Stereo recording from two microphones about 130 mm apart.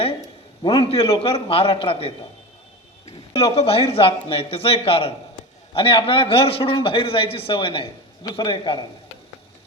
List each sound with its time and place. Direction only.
0.2 s a man's voice: 35° left (ahead or behind)